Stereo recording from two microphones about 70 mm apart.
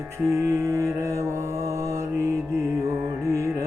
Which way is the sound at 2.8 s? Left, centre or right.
Right.